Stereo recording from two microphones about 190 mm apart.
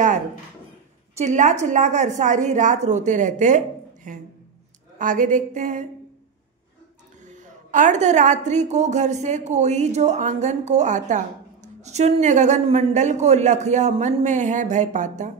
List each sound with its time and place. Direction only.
1.1 s a woman's voice: 40° right (ahead or behind)
7.2 s a woman's voice: 40° right (ahead or behind)